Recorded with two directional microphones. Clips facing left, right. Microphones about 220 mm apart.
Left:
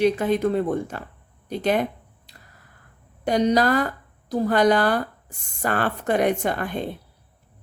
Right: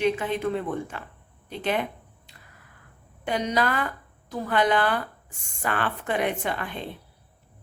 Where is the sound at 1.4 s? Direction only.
40° left (ahead or behind).